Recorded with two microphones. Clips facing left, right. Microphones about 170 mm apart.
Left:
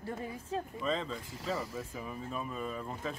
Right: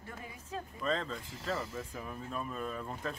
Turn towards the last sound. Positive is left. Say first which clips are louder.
# left 1 dB
turn(degrees=0)  # may be behind; listen again after turning